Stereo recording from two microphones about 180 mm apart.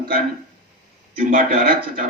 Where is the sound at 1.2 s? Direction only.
55° right (ahead or behind).